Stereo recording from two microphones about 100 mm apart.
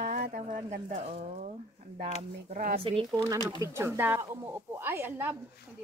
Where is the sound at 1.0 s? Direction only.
90° right.